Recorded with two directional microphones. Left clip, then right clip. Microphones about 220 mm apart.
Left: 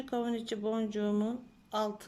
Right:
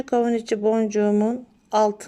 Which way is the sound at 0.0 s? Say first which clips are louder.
Right 14 dB; 45° right (ahead or behind).